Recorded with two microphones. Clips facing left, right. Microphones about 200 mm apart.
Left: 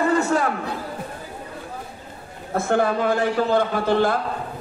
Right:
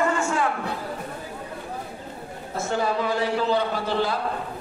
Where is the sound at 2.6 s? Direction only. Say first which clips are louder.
Left 5 dB; 55° left (ahead or behind).